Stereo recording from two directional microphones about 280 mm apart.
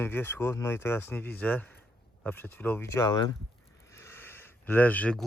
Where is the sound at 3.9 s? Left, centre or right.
Centre.